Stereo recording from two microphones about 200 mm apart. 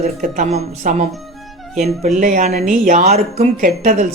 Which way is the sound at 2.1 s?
40° right (ahead or behind).